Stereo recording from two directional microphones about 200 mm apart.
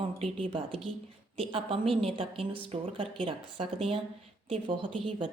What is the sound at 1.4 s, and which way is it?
A woman's voice, 30° right (ahead or behind).